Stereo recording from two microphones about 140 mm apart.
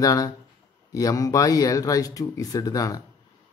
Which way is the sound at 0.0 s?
25° left (ahead or behind).